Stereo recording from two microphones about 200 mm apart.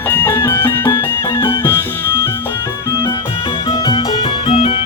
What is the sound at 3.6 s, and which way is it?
Music, 25° left (ahead or behind).